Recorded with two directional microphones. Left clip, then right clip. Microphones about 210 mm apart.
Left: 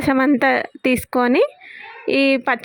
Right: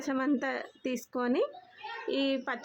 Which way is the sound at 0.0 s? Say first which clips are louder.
Left 15 dB; 40° left (ahead or behind).